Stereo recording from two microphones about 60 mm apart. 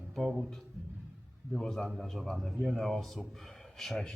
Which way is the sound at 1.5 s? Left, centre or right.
Centre.